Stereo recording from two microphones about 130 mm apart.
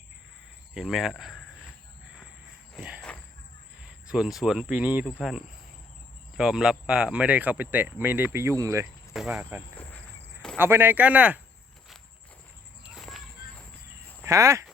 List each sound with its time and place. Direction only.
0.7 s speech: 5° right (ahead or behind)
3.8 s speech: 5° right (ahead or behind)
5.0 s speech: centre (ahead or behind); by 8.9 s 25° right (ahead or behind)
9.1 s speech: 5° right (ahead or behind)
10.6 s speech: 15° right (ahead or behind)
12.8 s walk: 5° right (ahead or behind)
14.3 s speech: 25° right (ahead or behind)